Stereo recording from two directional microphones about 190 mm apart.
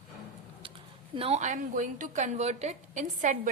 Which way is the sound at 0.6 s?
30° right (ahead or behind).